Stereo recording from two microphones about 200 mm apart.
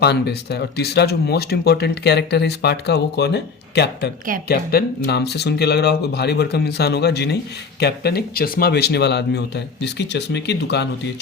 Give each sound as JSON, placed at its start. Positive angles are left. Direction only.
{"t": 0.0, "sound": "speech", "side_deg": 55}